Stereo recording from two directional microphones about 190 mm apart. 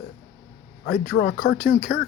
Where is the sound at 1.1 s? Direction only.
65° left (ahead or behind).